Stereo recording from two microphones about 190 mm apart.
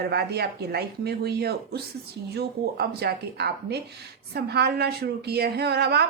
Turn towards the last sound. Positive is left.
turn(degrees=-60)  # may be behind; listen again after turning